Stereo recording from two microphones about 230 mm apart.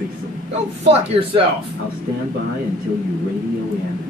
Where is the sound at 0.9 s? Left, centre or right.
Right.